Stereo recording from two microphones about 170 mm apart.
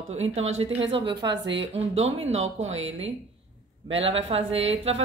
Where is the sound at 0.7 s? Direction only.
35° right (ahead or behind).